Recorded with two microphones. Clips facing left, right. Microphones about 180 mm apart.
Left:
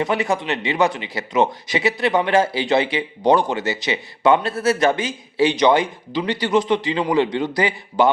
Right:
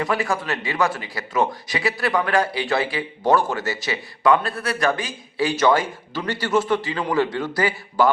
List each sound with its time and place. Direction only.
0.0 s speech: 20° left (ahead or behind)